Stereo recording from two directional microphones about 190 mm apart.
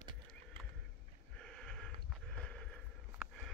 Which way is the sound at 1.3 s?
5° left (ahead or behind).